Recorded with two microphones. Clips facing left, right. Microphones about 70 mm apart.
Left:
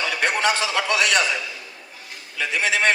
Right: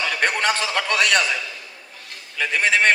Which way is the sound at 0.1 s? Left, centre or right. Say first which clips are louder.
Even; right.